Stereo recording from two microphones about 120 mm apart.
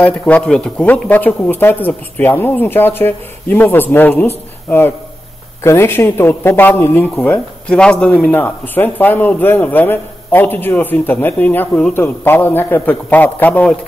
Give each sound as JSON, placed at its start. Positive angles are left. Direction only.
{"t": 0.0, "sound": "a man's voice", "side_deg": 10}